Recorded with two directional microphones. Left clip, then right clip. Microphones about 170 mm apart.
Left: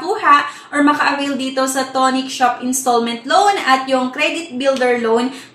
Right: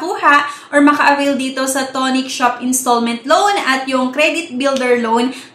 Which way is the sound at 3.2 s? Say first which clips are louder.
Right 1 dB; 30° right (ahead or behind).